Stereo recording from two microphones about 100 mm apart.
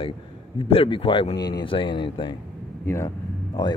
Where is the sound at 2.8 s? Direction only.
25° left (ahead or behind).